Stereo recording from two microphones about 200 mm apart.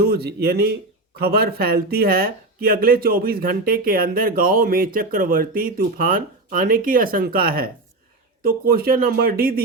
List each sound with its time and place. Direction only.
0.0 s speech: 50° right (ahead or behind)